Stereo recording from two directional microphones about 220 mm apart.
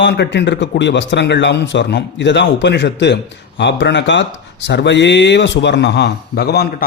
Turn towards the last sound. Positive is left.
turn(degrees=45)  # may be behind; listen again after turning